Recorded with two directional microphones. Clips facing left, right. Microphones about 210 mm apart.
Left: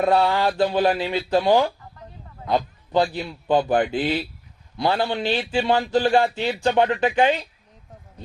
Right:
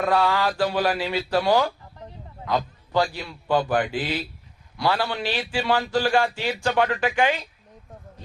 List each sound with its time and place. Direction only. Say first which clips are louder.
0.0 s a man's voice: left 3 dB; 25° left (ahead or behind)
2.9 s a man's voice: left 3 dB; 20° left (ahead or behind)